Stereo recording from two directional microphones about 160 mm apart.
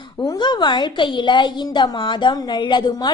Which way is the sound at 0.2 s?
25° left (ahead or behind).